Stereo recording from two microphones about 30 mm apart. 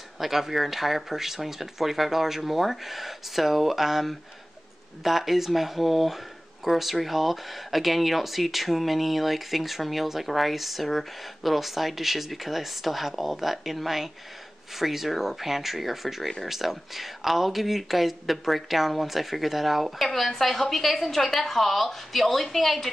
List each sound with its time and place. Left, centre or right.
0.2 s speech: centre
20.0 s speech: centre